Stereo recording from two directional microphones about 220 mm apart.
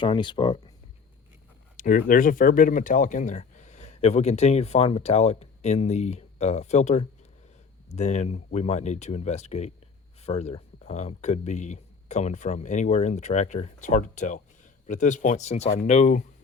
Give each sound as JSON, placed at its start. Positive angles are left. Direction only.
{"t": 0.0, "sound": "speech", "side_deg": 20}
{"t": 1.7, "sound": "speech", "side_deg": 35}